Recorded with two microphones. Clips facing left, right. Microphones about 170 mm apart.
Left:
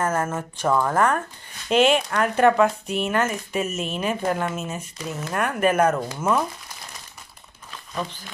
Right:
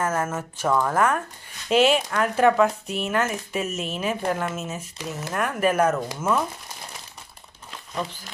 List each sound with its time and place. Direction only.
0.0 s speech: 5° right (ahead or behind)